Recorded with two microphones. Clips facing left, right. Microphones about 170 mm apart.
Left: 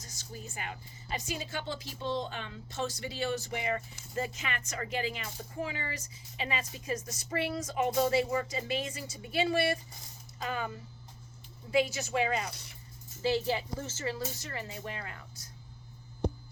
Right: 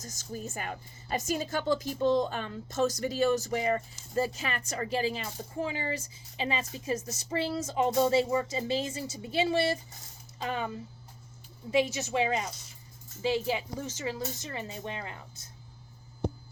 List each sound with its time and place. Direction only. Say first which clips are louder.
0.0 s a woman's voice: right 7 dB; 45° right (ahead or behind); by 10.7 s 25° right (ahead or behind)
11.7 s speech: right 1 dB; 20° right (ahead or behind)
12.5 s speech: right 1 dB; 65° left (ahead or behind)
13.2 s speech: right 1 dB; 15° right (ahead or behind)